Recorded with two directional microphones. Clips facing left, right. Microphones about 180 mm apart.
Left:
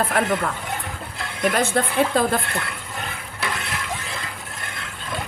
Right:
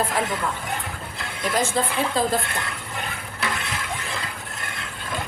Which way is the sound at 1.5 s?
60° left (ahead or behind).